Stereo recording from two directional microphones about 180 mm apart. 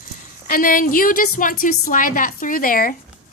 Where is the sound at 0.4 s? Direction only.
50° left (ahead or behind).